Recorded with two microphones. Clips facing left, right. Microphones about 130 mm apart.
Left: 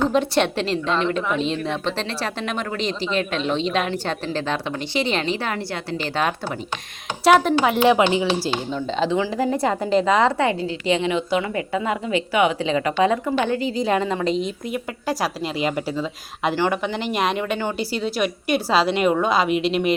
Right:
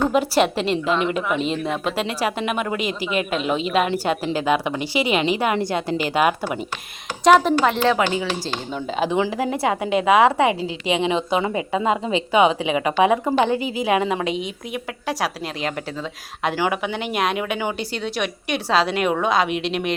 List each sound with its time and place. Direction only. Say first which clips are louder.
0.0 s a woman's voice: right 1 dB; 5° right (ahead or behind)
7.3 s speech: right 1 dB; centre (ahead or behind); by 8.4 s 20° left (ahead or behind)
8.7 s a woman's voice: right 1 dB; 15° right (ahead or behind)
9.3 s a woman's voice: left 1 dB; 5° right (ahead or behind)